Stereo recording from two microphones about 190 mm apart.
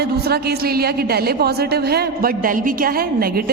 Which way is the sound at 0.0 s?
55° right (ahead or behind).